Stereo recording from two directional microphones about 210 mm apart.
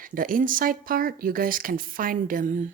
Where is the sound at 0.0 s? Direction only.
40° right (ahead or behind).